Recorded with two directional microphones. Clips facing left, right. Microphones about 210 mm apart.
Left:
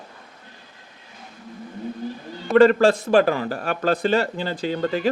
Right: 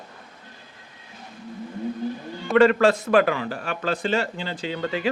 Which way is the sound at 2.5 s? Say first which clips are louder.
Left 2 dB; 35° left (ahead or behind).